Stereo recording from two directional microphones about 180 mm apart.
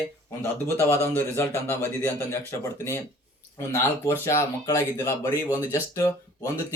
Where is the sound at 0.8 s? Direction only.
15° left (ahead or behind).